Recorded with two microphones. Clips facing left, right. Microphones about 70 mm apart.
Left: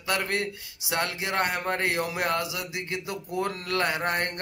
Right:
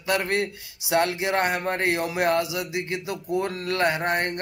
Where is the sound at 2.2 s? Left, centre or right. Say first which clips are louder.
Right 5 dB; centre.